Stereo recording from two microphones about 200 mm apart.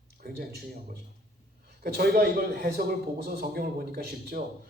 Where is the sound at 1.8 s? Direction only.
50° right (ahead or behind).